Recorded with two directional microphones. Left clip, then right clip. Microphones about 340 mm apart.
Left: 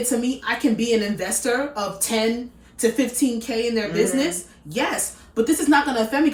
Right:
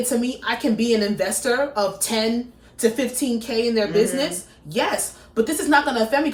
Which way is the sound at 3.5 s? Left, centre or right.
Centre.